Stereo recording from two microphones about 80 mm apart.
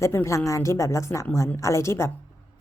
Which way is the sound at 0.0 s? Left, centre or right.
Left.